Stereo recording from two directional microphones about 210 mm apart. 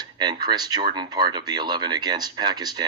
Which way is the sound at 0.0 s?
20° right (ahead or behind).